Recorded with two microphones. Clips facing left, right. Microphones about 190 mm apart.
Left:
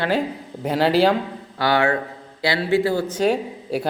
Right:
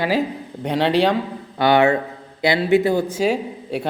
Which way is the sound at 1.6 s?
20° right (ahead or behind).